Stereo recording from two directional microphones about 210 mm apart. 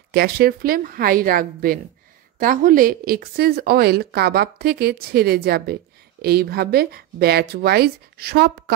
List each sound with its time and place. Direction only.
0.1 s a woman's voice: 45° right (ahead or behind)